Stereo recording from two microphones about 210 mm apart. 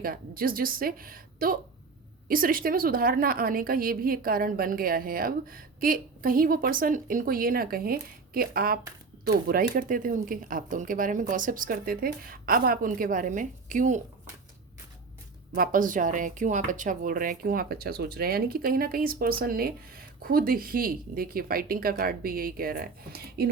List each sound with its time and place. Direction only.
0.0 s a woman's voice: 45° right (ahead or behind)
15.5 s a woman's voice: 40° right (ahead or behind)